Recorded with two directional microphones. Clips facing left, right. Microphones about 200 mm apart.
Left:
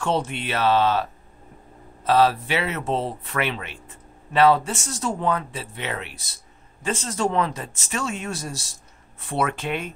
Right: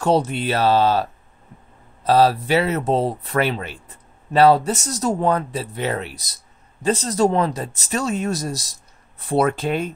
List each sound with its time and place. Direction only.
0.0 s speech: 40° right (ahead or behind)
2.0 s speech: 35° right (ahead or behind)